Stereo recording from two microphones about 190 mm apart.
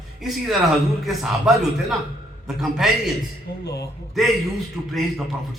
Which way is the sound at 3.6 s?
60° left (ahead or behind).